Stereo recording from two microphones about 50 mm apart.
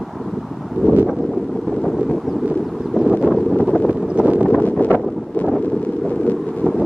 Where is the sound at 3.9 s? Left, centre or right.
Right.